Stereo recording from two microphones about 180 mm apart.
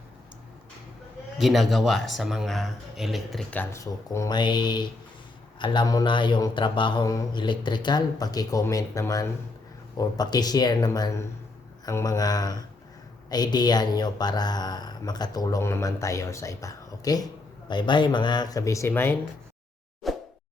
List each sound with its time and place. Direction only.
1.4 s speech: centre (ahead or behind)
20.0 s plop: centre (ahead or behind)